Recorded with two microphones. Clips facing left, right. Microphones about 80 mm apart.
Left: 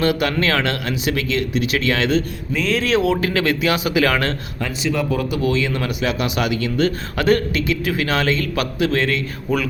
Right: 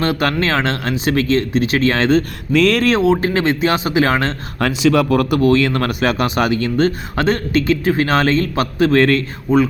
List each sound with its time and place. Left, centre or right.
0.0 s speech: right
2.5 s speech: right
3.0 s speech: right
4.6 s speech: right
9.5 s speech: right